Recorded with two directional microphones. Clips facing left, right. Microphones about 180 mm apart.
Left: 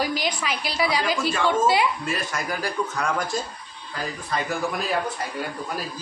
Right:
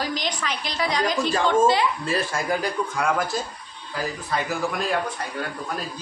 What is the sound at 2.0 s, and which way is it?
Speech, 30° right (ahead or behind).